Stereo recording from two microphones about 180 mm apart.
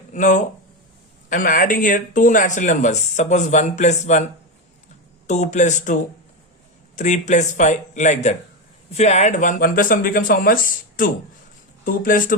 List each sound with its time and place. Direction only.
0.1 s speech: 45° left (ahead or behind)
5.3 s a man's voice: 40° left (ahead or behind)